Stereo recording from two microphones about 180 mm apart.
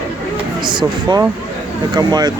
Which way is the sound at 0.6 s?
25° right (ahead or behind).